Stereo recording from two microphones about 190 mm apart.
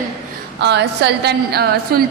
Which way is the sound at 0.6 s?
65° right (ahead or behind).